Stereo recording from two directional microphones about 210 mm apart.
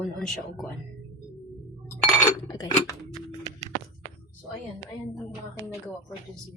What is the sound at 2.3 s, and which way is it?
Chink, 20° left (ahead or behind).